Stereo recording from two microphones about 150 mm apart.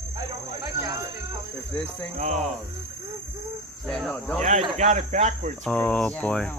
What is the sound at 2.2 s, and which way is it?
Speech, 50° right (ahead or behind).